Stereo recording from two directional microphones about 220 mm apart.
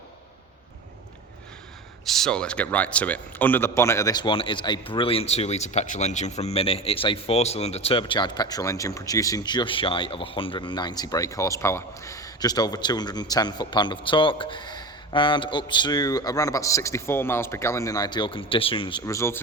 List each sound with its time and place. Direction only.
2.0 s speech: centre (ahead or behind)